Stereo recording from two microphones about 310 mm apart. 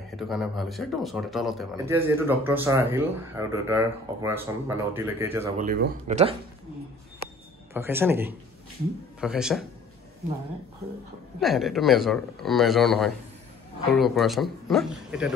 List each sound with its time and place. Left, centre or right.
0.2 s speech: centre
5.6 s speech: right
7.7 s speech: centre
11.3 s speech: centre